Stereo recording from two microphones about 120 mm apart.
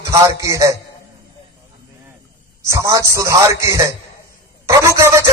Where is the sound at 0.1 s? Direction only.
25° right (ahead or behind).